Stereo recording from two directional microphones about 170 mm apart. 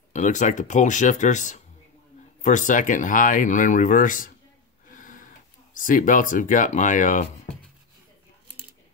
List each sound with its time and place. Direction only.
0.1 s speech: 45° left (ahead or behind)
4.9 s a sound: 50° left (ahead or behind)
5.8 s speech: 50° left (ahead or behind)